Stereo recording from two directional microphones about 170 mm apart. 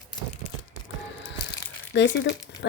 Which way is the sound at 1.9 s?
90° left.